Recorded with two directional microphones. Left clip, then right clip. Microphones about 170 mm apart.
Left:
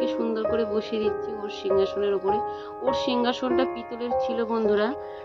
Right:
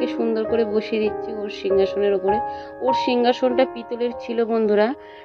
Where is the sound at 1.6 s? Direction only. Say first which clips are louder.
Right 5 dB; 35° left (ahead or behind).